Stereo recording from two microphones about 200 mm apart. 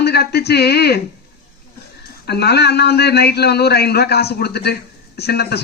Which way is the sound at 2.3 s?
55° left (ahead or behind).